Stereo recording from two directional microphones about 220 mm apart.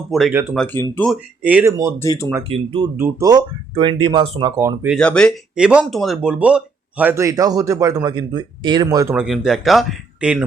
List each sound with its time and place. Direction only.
0.1 s speech: centre (ahead or behind)
0.6 s speech: 10° left (ahead or behind)
1.1 s speech: 5° right (ahead or behind)
2.0 s speech: 10° left (ahead or behind)
2.5 s speech: 25° right (ahead or behind)
4.9 s speech: 5° left (ahead or behind); by 9.1 s 15° right (ahead or behind)
9.1 s speech: centre (ahead or behind)